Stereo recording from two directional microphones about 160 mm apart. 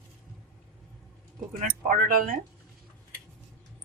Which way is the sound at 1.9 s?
60° right (ahead or behind).